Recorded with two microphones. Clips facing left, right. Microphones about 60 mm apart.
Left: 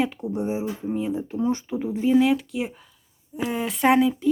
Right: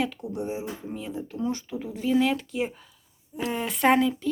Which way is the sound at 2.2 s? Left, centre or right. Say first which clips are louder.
Left 4 dB; centre.